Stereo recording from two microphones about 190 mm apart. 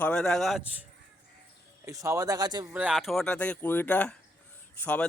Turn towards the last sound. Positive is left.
turn(degrees=10)  # may be behind; listen again after turning